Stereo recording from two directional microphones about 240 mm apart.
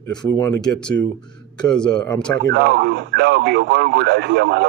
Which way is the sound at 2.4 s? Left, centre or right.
Right.